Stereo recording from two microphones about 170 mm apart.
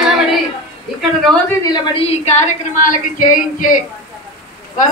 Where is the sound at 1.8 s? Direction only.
30° left (ahead or behind).